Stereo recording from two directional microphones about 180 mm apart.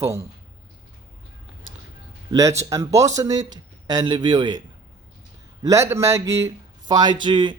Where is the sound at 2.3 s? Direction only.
20° right (ahead or behind).